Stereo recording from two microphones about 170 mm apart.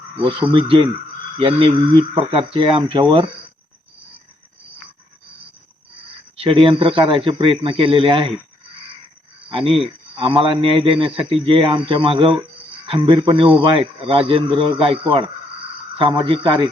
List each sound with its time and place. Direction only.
0.2 s speech: 30° right (ahead or behind)
6.3 s speech: 35° right (ahead or behind)
9.5 s speech: 30° right (ahead or behind)